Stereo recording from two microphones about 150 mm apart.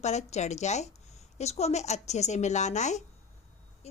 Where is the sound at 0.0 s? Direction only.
50° left (ahead or behind).